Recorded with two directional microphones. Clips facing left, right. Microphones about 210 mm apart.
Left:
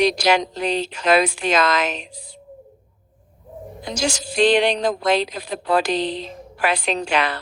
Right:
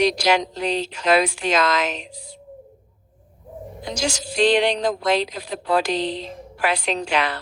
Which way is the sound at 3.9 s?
55° left (ahead or behind).